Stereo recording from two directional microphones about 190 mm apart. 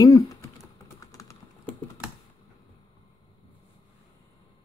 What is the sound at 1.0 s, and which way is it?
Typing, 15° left (ahead or behind).